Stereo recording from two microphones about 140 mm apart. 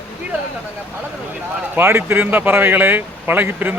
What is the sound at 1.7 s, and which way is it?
Speech, 15° right (ahead or behind).